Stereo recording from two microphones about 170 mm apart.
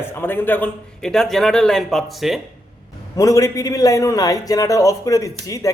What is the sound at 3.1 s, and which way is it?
A man's voice, 20° left (ahead or behind).